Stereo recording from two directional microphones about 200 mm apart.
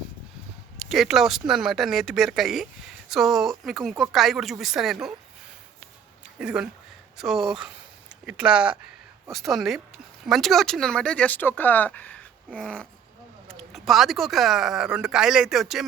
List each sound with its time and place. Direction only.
0.9 s speech: centre (ahead or behind)
6.4 s speech: 5° right (ahead or behind)